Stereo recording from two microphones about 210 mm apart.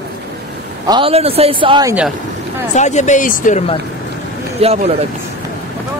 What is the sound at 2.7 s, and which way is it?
Speech, 35° left (ahead or behind).